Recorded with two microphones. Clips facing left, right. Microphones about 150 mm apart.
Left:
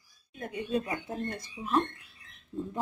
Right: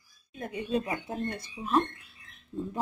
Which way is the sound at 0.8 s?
10° right (ahead or behind).